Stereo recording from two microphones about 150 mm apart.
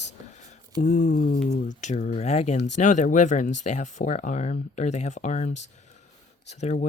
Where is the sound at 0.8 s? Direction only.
55° left (ahead or behind).